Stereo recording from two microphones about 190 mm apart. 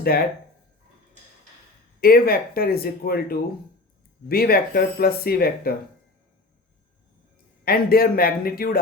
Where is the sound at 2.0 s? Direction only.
50° left (ahead or behind).